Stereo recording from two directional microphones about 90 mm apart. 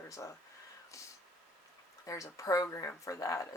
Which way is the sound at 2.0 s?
35° left (ahead or behind).